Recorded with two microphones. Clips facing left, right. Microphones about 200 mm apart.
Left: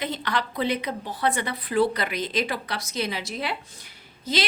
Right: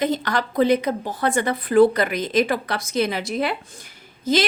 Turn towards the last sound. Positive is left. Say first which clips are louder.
# right 7 dB
turn(degrees=-45)  # may be behind; listen again after turning